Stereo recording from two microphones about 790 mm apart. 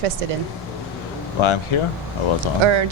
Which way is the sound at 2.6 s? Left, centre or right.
Right.